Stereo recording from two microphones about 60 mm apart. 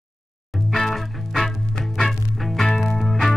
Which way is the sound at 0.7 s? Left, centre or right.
Centre.